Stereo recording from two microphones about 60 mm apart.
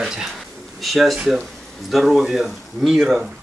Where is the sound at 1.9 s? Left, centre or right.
Centre.